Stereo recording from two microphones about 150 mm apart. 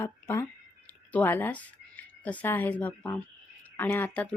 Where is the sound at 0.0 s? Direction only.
15° left (ahead or behind).